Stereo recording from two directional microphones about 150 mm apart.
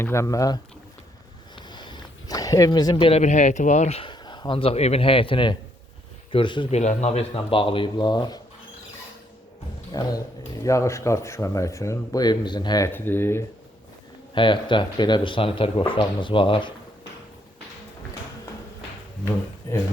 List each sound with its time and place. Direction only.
0.0 s speech: 20° left (ahead or behind); by 4.1 s 45° left (ahead or behind)
4.1 s speech: 30° left (ahead or behind)
6.7 s speech: 50° left (ahead or behind); by 8.4 s 30° left (ahead or behind)
10.0 s speech: 25° left (ahead or behind)
12.9 s speech: 15° left (ahead or behind)
14.3 s speech: 30° left (ahead or behind)